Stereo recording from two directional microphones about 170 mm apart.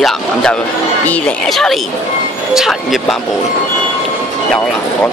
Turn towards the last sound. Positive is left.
turn(degrees=0)  # may be behind; listen again after turning